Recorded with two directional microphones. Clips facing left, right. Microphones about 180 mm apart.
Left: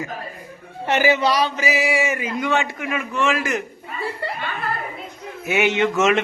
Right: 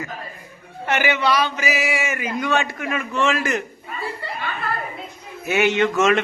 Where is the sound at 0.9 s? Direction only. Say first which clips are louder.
Left 2 dB; 35° left (ahead or behind).